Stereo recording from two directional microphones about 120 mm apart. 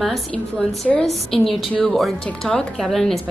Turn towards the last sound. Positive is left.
turn(degrees=0)  # may be behind; listen again after turning